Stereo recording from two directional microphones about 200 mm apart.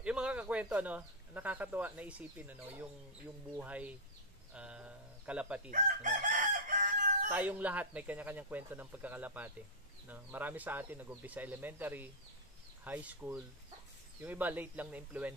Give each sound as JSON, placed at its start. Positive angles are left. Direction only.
{"t": 0.0, "sound": "speech", "side_deg": -5}
{"t": 5.7, "sound": "chicken", "side_deg": -40}
{"t": 7.2, "sound": "speech", "side_deg": -10}